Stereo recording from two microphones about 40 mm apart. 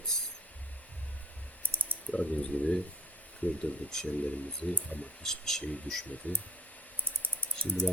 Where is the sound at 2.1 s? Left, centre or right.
Left.